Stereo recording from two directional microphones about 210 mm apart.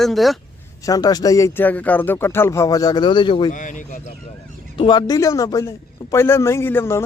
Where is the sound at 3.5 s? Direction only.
35° left (ahead or behind).